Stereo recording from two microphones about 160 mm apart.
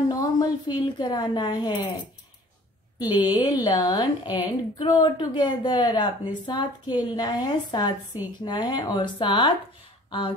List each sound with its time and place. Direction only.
0.1 s a woman's voice: 25° left (ahead or behind)
3.0 s speech: 25° left (ahead or behind)